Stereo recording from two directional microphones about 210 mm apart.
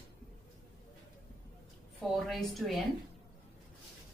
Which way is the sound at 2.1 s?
Centre (ahead or behind).